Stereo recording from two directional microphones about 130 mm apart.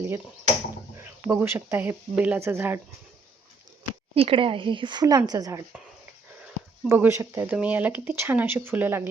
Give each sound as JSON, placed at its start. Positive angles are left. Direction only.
{"t": 0.9, "sound": "speech", "side_deg": -20}
{"t": 4.1, "sound": "speech", "side_deg": -45}
{"t": 6.8, "sound": "speech", "side_deg": -15}